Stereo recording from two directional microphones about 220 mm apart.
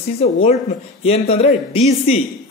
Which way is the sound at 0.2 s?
30° left (ahead or behind).